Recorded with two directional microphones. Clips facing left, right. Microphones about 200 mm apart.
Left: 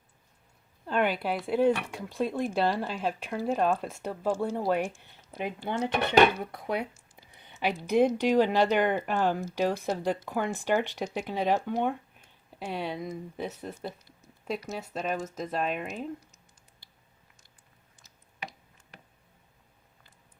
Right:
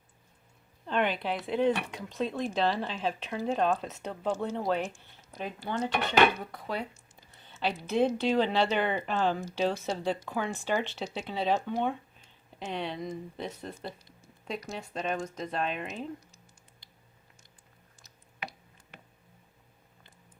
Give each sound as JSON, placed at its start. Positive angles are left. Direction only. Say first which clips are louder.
{"t": 0.9, "sound": "speech", "louder": "left 2 dB", "side_deg": 5}
{"t": 6.7, "sound": "a sound", "louder": "left 2 dB", "side_deg": 15}
{"t": 7.9, "sound": "speech", "louder": "left 3 dB", "side_deg": 15}